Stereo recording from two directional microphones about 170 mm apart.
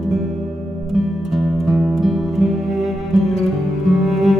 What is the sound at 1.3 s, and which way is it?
Music, centre (ahead or behind).